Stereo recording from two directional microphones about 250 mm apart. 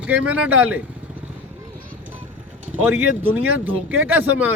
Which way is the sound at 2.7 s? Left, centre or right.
Centre.